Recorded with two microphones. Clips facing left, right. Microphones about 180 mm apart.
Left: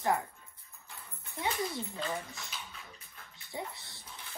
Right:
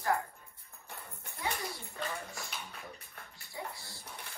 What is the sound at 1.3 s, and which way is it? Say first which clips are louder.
Speech: left 4 dB; 25° left (ahead or behind).